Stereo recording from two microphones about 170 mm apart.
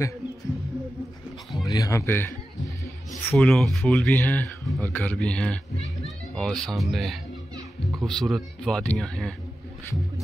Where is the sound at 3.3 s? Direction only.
5° left (ahead or behind).